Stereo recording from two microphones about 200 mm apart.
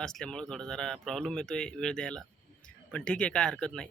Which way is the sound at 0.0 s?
5° left (ahead or behind).